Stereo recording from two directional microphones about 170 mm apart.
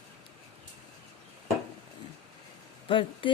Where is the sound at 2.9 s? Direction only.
30° left (ahead or behind).